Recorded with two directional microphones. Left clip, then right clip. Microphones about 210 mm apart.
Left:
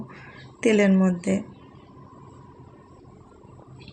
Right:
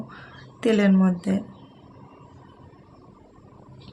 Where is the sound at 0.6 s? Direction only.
Centre (ahead or behind).